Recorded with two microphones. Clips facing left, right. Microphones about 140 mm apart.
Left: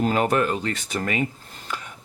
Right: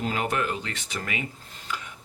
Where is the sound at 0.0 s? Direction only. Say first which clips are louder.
Left 7 dB; 45° left (ahead or behind).